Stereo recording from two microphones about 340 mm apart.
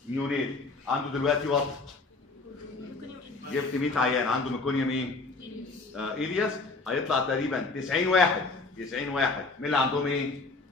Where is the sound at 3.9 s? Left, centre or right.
Centre.